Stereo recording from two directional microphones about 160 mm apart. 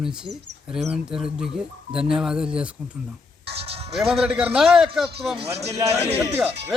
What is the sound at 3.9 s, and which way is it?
Speech, centre (ahead or behind).